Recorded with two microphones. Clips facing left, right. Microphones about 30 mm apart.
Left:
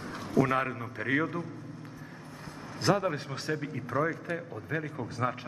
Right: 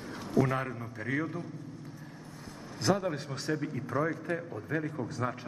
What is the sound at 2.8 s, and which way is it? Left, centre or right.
A man's voice, centre.